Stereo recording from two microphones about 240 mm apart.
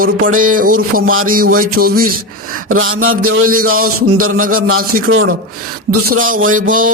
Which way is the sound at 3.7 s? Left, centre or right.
Right.